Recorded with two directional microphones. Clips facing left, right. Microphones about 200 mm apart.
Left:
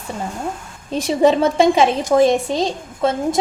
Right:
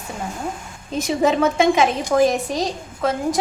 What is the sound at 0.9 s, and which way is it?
A woman's voice, 30° left (ahead or behind).